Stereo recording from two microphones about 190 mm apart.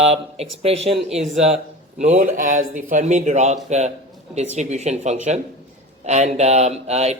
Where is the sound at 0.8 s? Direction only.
Centre (ahead or behind).